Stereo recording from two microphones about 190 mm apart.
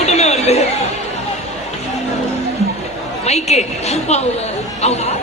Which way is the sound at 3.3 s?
35° left (ahead or behind).